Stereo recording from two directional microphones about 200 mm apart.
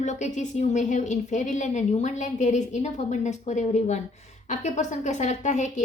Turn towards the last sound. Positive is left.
turn(degrees=35)  # may be behind; listen again after turning